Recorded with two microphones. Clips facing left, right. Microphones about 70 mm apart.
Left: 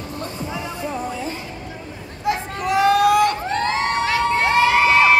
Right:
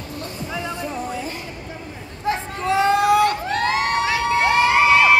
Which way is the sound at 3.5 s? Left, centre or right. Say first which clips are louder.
Even; left.